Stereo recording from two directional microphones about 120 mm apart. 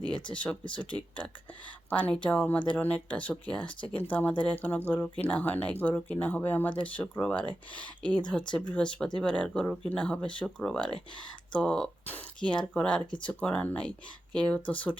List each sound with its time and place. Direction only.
0.3 s speech: 10° left (ahead or behind)